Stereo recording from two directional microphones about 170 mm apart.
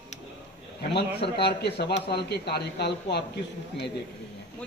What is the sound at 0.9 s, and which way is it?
A man's voice, 75° left (ahead or behind).